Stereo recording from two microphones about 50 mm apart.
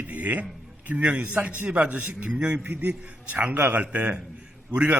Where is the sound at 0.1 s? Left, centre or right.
Right.